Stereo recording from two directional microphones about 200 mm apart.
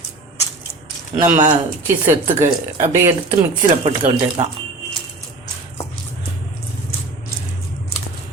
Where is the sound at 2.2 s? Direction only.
40° right (ahead or behind).